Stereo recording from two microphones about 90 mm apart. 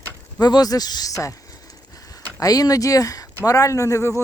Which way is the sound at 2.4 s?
40° left (ahead or behind).